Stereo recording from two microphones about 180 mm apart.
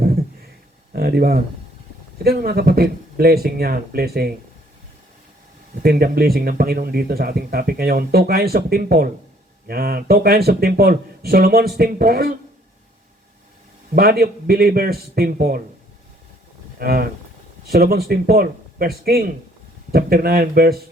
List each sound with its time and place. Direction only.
0.9 s speech: 60° right (ahead or behind)
5.8 s speech: 60° right (ahead or behind)
13.9 s speech: 60° right (ahead or behind)
16.7 s speech: 55° right (ahead or behind)